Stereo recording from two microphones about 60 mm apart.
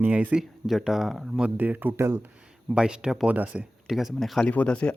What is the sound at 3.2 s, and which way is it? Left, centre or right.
Speech, right.